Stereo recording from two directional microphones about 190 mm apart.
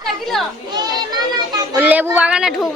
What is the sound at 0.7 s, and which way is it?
Children playing, 20° right (ahead or behind).